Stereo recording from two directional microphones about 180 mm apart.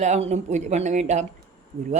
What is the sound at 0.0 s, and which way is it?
A man's voice, 40° right (ahead or behind).